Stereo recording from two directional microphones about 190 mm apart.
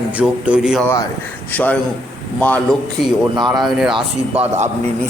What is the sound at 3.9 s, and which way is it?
Speech, 35° right (ahead or behind).